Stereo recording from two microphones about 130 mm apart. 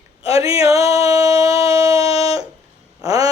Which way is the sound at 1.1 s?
25° right (ahead or behind).